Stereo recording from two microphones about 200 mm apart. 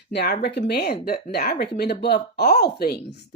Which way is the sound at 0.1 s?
55° left (ahead or behind).